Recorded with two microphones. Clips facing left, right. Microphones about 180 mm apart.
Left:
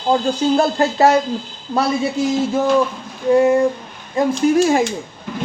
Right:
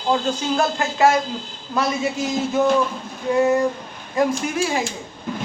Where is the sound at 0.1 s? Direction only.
35° left (ahead or behind).